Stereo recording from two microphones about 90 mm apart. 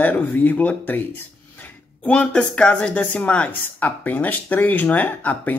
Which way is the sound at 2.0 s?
10° left (ahead or behind).